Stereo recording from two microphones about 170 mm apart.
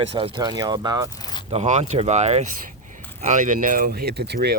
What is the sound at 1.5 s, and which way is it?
Speech, 40° right (ahead or behind).